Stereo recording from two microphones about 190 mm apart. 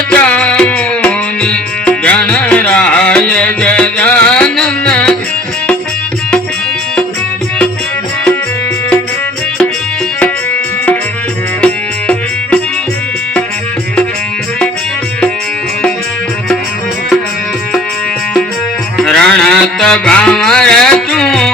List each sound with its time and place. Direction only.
0.1 s music: 5° left (ahead or behind)
11.6 s music: 5° left (ahead or behind)
18.9 s music: 5° left (ahead or behind)